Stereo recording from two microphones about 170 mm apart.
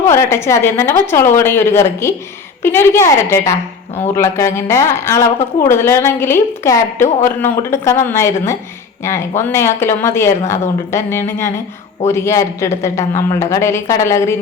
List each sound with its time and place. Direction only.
0.1 s speech: 15° left (ahead or behind)